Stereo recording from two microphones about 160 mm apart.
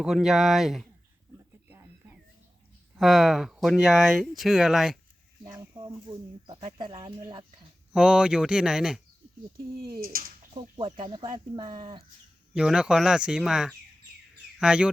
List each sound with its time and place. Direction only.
0.0 s speech: 5° right (ahead or behind)
2.9 s speech: centre (ahead or behind)
5.4 s speech: 25° right (ahead or behind)
7.9 s speech: 5° right (ahead or behind)
10.0 s speech: 65° right (ahead or behind)
10.5 s speech: 35° right (ahead or behind)
12.5 s speech: 5° right (ahead or behind)